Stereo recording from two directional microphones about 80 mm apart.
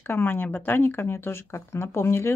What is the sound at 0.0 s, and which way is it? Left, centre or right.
Speech, left.